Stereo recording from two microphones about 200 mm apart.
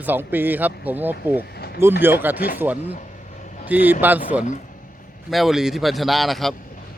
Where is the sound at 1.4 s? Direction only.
50° left (ahead or behind).